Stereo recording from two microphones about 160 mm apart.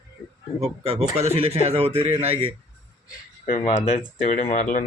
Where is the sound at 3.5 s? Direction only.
45° left (ahead or behind).